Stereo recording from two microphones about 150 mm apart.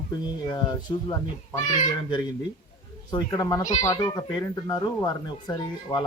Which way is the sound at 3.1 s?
25° left (ahead or behind).